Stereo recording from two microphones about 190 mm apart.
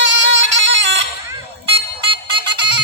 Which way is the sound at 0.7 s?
65° right (ahead or behind).